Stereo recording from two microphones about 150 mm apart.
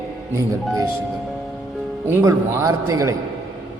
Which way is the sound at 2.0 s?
15° right (ahead or behind).